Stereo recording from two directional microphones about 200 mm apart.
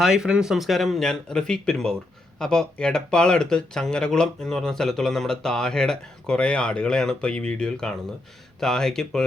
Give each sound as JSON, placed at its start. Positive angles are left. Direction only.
{"t": 0.0, "sound": "speech", "side_deg": -5}